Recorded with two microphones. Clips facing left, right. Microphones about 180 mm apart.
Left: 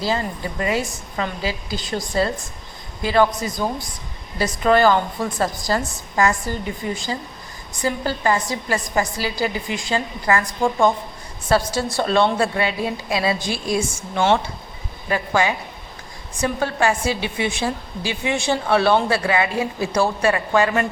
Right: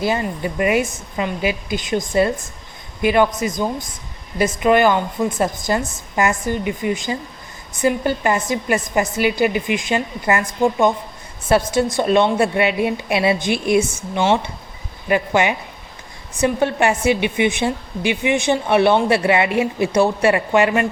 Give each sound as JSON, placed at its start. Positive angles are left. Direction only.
{"t": 0.0, "sound": "a woman's voice", "side_deg": -20}
{"t": 13.9, "sound": "speech", "side_deg": -5}
{"t": 15.1, "sound": "a woman's voice", "side_deg": -20}